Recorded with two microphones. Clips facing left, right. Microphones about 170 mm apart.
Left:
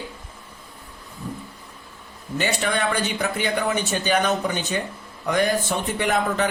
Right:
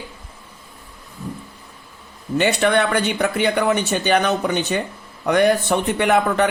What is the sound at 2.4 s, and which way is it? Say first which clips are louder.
Speech: right 6 dB; 65° right (ahead or behind).